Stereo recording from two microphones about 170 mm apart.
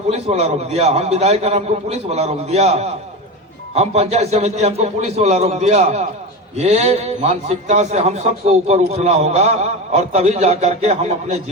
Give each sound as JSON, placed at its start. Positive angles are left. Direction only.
{"t": 0.1, "sound": "a man's voice", "side_deg": -40}